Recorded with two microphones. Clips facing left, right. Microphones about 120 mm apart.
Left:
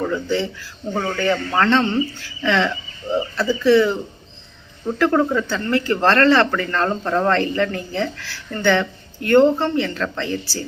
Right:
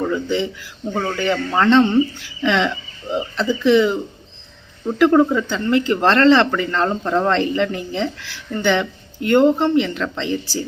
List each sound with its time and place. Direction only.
0.0 s speech: 15° right (ahead or behind)